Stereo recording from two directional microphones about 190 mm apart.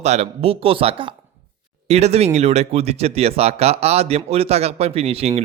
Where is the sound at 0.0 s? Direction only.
35° right (ahead or behind).